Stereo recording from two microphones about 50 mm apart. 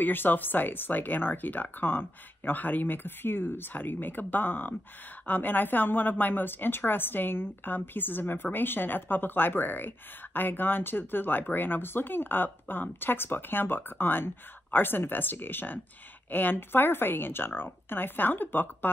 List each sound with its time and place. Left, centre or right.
0.0 s a woman's voice: left